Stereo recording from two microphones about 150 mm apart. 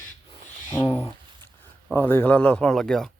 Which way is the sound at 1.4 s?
15° left (ahead or behind).